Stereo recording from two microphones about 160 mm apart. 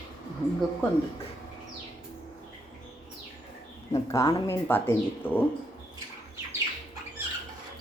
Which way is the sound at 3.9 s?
20° left (ahead or behind).